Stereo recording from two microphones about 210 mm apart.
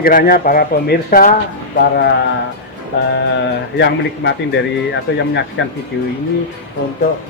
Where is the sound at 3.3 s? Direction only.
55° left (ahead or behind).